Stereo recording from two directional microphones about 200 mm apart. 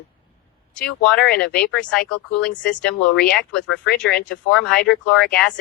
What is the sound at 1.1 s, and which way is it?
Speech, 55° left (ahead or behind).